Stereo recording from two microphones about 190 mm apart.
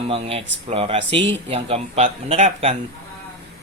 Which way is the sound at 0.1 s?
30° right (ahead or behind).